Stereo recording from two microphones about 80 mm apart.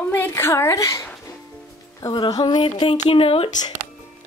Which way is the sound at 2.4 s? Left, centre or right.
Left.